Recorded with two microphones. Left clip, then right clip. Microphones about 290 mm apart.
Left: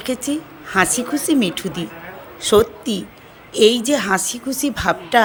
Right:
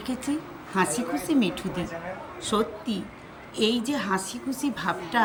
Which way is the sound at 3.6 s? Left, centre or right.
Centre.